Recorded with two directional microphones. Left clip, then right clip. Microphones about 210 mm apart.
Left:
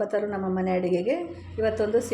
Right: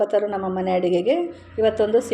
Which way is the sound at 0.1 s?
5° right (ahead or behind).